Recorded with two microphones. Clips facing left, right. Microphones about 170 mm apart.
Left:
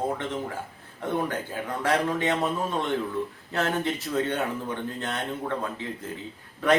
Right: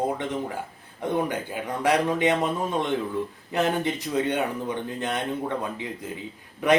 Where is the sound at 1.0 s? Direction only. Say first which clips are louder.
Right 2 dB; 15° right (ahead or behind).